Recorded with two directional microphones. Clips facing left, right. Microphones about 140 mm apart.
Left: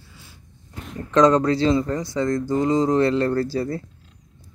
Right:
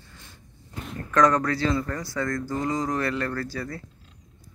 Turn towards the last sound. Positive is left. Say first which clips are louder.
# left 9 dB
turn(degrees=30)  # may be behind; listen again after turning